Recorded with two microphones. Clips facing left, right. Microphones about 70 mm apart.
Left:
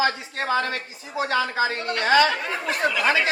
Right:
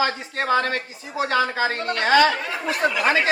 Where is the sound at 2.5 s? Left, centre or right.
Left.